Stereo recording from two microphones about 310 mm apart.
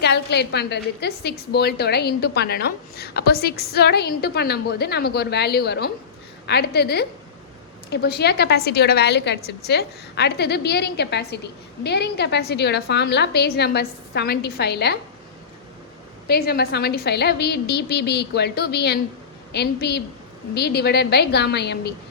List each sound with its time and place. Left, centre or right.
0.0 s a woman's voice: left
16.2 s a woman's voice: left